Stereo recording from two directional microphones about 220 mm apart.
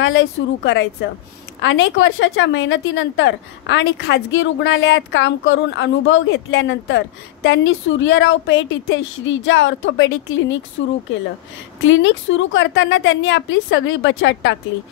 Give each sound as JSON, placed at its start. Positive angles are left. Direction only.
{"t": 0.0, "sound": "a woman's voice", "side_deg": 55}
{"t": 11.8, "sound": "a woman's voice", "side_deg": 60}